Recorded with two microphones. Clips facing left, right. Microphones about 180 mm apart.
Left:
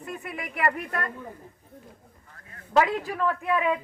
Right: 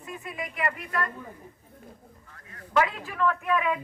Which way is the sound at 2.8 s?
40° left (ahead or behind).